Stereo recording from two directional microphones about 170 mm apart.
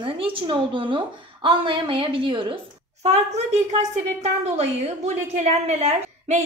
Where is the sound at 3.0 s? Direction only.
40° right (ahead or behind).